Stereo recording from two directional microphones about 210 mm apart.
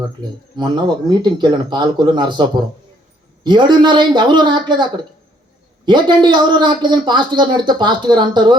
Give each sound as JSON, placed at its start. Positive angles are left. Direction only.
{"t": 0.2, "sound": "a man's voice", "side_deg": -20}